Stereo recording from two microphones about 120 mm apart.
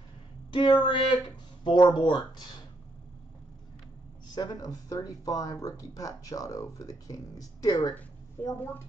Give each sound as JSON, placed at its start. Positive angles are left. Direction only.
{"t": 0.5, "sound": "speech", "side_deg": 40}
{"t": 4.4, "sound": "speech", "side_deg": 30}